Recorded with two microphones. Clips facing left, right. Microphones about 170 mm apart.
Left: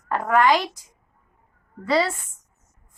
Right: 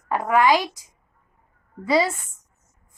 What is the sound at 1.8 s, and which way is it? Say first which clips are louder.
Speech: right 1 dB; 10° right (ahead or behind).